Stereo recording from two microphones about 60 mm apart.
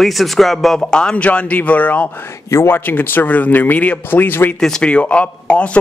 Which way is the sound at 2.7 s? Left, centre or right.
Left.